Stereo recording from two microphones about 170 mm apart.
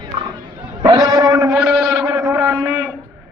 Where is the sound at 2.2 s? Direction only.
10° right (ahead or behind).